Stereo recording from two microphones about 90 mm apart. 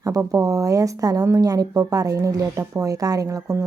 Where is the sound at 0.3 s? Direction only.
40° right (ahead or behind).